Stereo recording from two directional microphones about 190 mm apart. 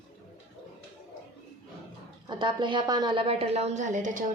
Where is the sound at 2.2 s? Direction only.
25° right (ahead or behind).